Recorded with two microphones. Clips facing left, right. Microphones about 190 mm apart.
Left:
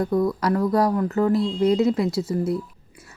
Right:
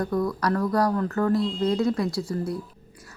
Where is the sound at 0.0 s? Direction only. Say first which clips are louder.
Left 4 dB; 20° left (ahead or behind).